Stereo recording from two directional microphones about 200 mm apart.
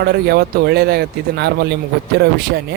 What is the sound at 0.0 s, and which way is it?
Speech, 50° right (ahead or behind).